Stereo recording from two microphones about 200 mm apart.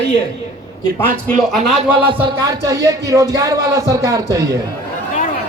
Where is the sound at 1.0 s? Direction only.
5° left (ahead or behind).